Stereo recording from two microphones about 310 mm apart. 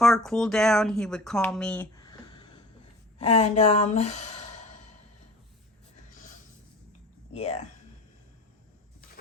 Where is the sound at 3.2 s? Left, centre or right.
Centre.